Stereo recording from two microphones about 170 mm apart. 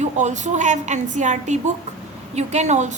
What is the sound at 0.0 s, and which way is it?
A woman's voice, 45° right (ahead or behind).